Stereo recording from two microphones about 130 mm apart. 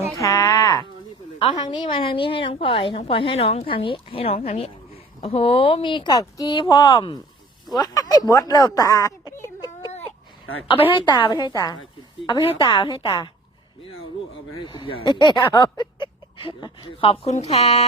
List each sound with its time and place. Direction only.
0.2 s a sound: 25° left (ahead or behind)
1.4 s speech: 40° left (ahead or behind)
10.9 s speech: 35° left (ahead or behind)
14.6 s speech: 40° left (ahead or behind); by 17.8 s 55° left (ahead or behind)